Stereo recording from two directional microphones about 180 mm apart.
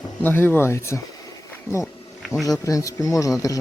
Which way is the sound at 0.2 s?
10° left (ahead or behind).